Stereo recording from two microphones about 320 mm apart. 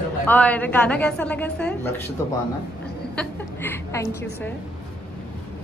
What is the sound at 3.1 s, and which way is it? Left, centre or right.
A woman's voice, centre.